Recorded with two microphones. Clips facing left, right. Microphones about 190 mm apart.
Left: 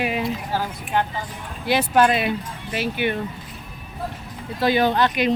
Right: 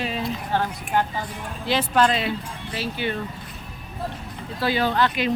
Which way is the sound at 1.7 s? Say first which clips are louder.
Left 3 dB; 10° left (ahead or behind).